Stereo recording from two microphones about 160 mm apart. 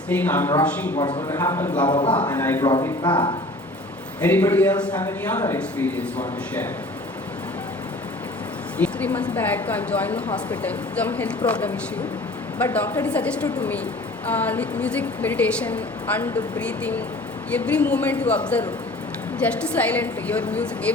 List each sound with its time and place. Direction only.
0.1 s a woman's voice: 10° left (ahead or behind)
1.9 s speech: 30° left (ahead or behind)
2.4 s a woman's voice: 15° left (ahead or behind)
3.0 s speech: 30° left (ahead or behind)
4.2 s a woman's voice: 10° left (ahead or behind)
8.8 s a woman's voice: 10° left (ahead or behind)